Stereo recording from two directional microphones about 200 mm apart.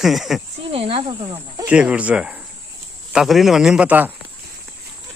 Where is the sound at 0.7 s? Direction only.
30° right (ahead or behind).